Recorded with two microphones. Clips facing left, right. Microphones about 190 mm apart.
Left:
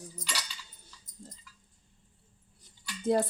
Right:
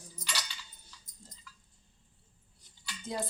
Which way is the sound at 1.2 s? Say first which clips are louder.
Left 9 dB; 60° left (ahead or behind).